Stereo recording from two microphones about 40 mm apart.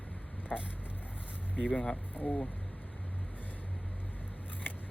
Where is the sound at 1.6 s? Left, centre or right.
Left.